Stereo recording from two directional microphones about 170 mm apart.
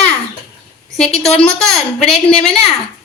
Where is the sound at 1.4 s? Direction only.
5° left (ahead or behind).